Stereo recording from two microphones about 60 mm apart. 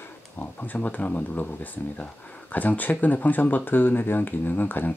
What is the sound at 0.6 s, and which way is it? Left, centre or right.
Speech, left.